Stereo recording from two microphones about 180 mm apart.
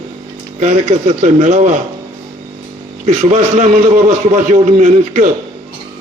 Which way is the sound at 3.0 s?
45° right (ahead or behind).